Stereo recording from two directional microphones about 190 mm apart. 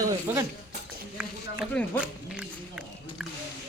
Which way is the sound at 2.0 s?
5° right (ahead or behind).